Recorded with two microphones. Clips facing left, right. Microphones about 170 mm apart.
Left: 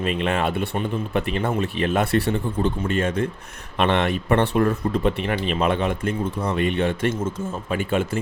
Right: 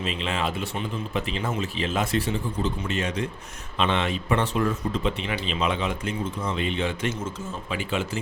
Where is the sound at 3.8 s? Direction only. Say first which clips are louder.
Left 4 dB; 60° left (ahead or behind).